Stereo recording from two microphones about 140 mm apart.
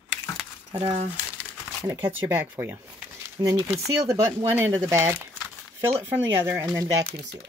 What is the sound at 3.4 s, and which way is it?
Speech, 25° right (ahead or behind).